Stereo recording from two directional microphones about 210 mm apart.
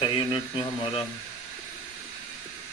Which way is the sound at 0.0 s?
20° left (ahead or behind).